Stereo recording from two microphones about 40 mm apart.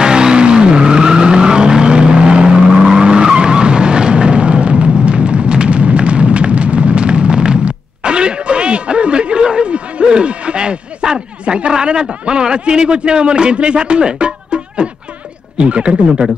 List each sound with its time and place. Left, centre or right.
0.0 s vehicle: right
15.5 s speech: right